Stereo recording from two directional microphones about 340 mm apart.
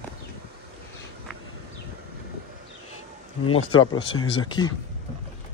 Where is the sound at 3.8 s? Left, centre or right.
Centre.